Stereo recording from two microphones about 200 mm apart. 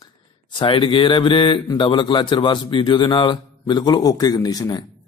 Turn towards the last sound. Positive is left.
turn(degrees=20)  # may be behind; listen again after turning